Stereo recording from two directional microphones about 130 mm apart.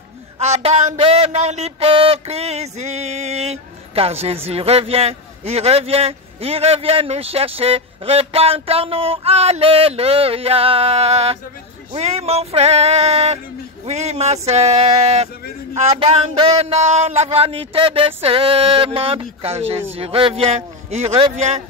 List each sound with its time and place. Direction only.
0.4 s a man's voice: 55° right (ahead or behind)